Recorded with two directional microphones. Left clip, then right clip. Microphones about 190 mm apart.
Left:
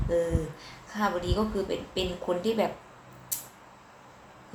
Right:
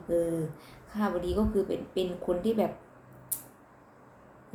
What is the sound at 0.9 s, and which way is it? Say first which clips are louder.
A woman's voice: left 2 dB; 5° right (ahead or behind).